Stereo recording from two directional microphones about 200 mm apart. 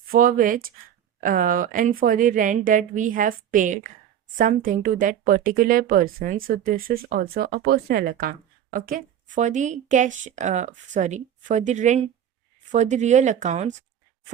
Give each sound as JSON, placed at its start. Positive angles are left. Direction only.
{"t": 0.1, "sound": "speech", "side_deg": -45}